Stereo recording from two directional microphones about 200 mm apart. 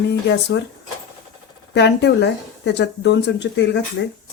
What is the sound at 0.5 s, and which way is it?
Speech, 55° left (ahead or behind).